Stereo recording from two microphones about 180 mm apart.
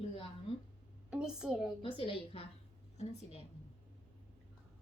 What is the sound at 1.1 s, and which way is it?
Speech, 5° right (ahead or behind).